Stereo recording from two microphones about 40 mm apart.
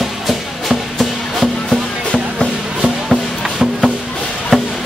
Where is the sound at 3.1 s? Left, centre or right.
Centre.